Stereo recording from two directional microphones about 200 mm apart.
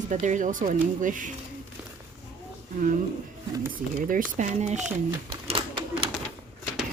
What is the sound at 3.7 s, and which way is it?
Speech, 40° right (ahead or behind).